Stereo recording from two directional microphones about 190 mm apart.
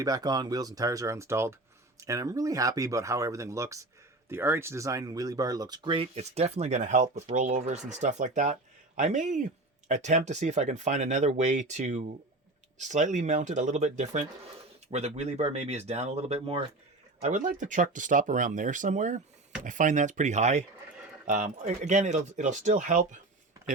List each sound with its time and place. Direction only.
0.0 s speech: 20° right (ahead or behind); by 23.2 s 40° right (ahead or behind)